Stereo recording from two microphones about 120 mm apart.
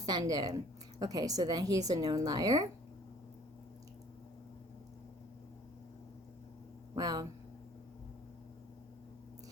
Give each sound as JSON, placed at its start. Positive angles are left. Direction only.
{"t": 0.0, "sound": "a woman's voice", "side_deg": -35}
{"t": 6.9, "sound": "speech", "side_deg": -35}